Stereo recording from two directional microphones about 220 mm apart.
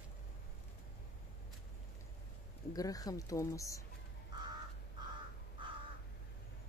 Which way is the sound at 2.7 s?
15° left (ahead or behind).